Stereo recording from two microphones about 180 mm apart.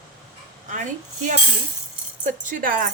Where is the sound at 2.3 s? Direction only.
45° right (ahead or behind).